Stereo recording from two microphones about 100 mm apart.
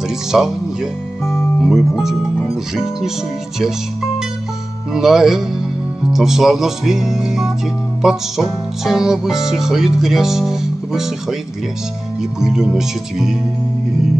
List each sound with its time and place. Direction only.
0.3 s speech: 5° right (ahead or behind)
1.2 s speech: 25° left (ahead or behind)
1.6 s speech: centre (ahead or behind)
4.9 s speech: 5° right (ahead or behind)